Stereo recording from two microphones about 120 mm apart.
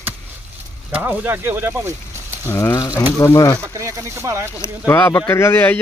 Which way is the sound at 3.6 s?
25° right (ahead or behind).